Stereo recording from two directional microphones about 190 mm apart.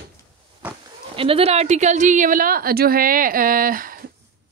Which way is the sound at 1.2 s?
30° right (ahead or behind).